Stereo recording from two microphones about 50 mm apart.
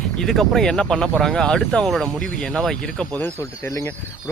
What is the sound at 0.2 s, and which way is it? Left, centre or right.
Speech, centre.